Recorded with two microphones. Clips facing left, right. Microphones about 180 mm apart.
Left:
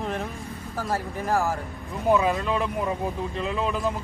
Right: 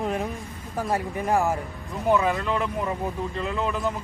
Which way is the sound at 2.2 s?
15° left (ahead or behind).